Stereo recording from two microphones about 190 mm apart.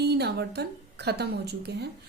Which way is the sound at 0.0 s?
60° right (ahead or behind).